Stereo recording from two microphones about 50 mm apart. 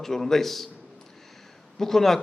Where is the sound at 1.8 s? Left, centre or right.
Centre.